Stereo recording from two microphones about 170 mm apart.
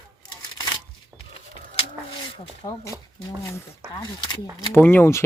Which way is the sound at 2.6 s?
30° left (ahead or behind).